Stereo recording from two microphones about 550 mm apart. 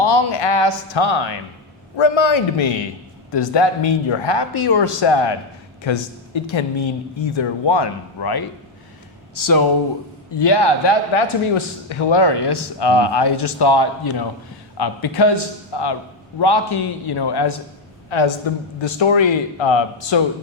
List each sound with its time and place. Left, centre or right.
0.3 s a man's voice: left
10.3 s a man's voice: left
18.1 s a man's voice: left